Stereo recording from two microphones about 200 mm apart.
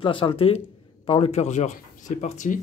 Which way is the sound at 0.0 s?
25° left (ahead or behind).